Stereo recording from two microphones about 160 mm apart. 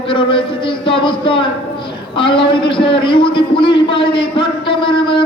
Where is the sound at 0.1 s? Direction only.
35° left (ahead or behind).